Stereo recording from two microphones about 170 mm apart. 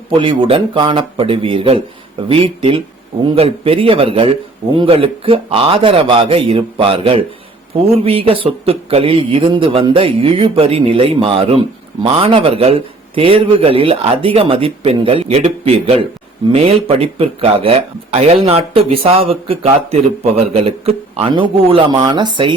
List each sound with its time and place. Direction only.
0.2 s speech: 30° right (ahead or behind)